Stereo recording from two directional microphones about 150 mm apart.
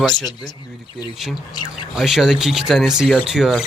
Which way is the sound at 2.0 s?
Centre (ahead or behind).